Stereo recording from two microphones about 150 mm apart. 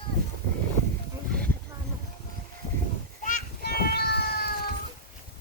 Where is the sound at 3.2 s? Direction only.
75° left (ahead or behind).